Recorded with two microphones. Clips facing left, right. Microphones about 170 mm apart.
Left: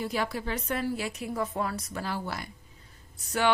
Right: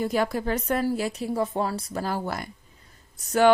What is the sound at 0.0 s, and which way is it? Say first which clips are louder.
A woman's voice: right 6 dB; 45° right (ahead or behind).